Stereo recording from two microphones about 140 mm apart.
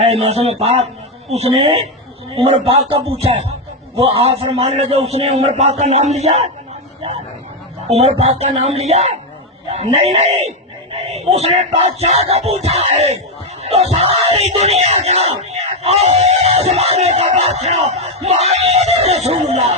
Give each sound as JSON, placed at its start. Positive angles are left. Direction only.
{"t": 0.0, "sound": "music", "side_deg": -50}
{"t": 4.0, "sound": "music", "side_deg": -45}
{"t": 7.9, "sound": "music", "side_deg": -50}